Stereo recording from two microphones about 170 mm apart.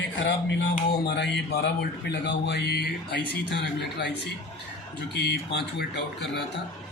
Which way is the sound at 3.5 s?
90° left.